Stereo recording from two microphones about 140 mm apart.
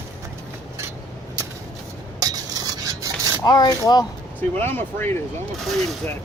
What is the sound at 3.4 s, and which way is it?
Speech, 30° left (ahead or behind).